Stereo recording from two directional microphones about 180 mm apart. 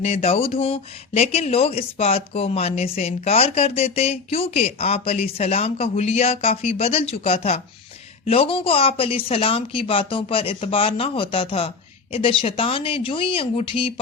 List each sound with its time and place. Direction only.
0.0 s speech: 35° left (ahead or behind)